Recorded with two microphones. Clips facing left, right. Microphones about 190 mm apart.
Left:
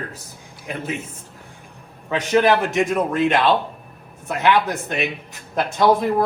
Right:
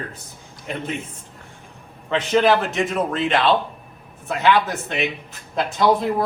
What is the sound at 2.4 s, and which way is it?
Speech, 15° left (ahead or behind).